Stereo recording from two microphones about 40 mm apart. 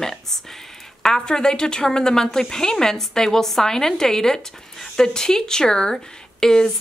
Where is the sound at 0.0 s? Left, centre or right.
Centre.